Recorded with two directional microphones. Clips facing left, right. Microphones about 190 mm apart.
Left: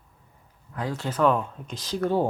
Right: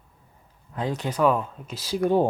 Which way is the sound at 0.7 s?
20° right (ahead or behind).